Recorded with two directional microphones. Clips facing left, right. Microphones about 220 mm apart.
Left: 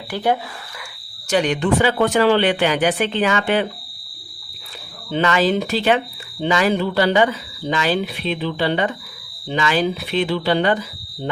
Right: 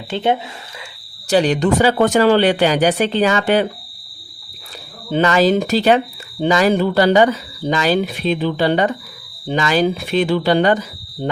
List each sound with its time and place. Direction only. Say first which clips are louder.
0.1 s speech: right 2 dB; 25° right (ahead or behind)
1.3 s speech: right 3 dB; 35° right (ahead or behind)
5.1 s speech: right 4 dB; 40° right (ahead or behind)